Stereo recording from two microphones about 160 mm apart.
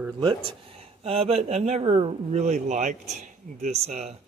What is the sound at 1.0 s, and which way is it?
Speech, 40° right (ahead or behind).